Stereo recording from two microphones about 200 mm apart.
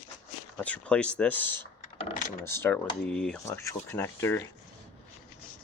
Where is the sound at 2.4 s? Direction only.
10° left (ahead or behind).